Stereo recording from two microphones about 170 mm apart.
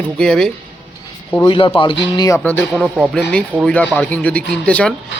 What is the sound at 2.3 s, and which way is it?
Speech, 10° left (ahead or behind).